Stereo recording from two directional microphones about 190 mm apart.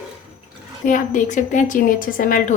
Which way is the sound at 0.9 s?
45° left (ahead or behind).